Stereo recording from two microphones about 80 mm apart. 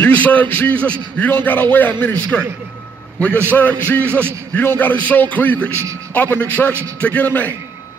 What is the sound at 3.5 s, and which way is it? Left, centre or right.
A man's voice, left.